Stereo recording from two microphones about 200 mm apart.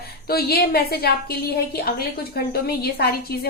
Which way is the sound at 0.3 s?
50° left (ahead or behind).